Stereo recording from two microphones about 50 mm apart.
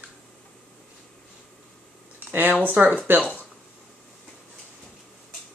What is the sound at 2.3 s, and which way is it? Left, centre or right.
Speech, right.